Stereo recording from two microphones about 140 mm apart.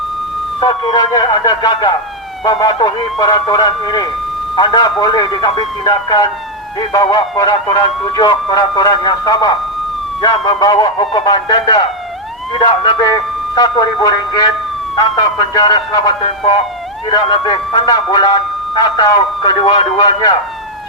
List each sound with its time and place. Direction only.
0.6 s speech: 35° left (ahead or behind)
16.2 s speech: 40° left (ahead or behind)